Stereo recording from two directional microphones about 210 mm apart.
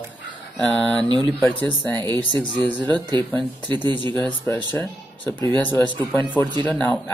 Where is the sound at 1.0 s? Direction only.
20° right (ahead or behind).